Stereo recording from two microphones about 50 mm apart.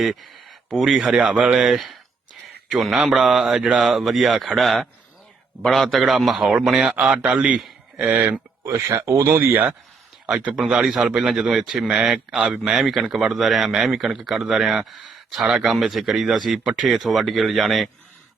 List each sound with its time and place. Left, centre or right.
0.0 s speech: centre
1.3 s a man's voice: centre
1.7 s speech: centre
3.8 s a man's voice: centre; by 8.2 s right
8.6 s speech: right
9.4 s speech: right
10.2 s a man's voice: right; by 17.8 s centre